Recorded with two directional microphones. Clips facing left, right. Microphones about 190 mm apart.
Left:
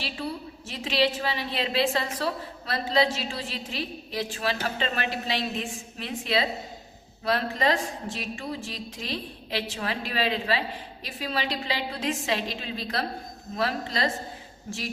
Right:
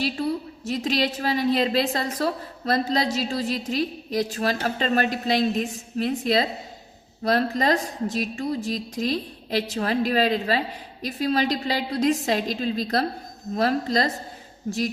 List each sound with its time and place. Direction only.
0.0 s a woman's voice: 40° right (ahead or behind)